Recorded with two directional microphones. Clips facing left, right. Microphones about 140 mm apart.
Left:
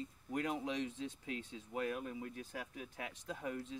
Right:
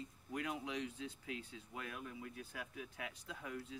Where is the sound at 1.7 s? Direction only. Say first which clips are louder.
Left 9 dB; 35° left (ahead or behind).